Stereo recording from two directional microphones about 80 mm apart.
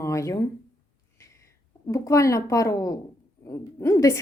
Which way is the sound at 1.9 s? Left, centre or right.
Left.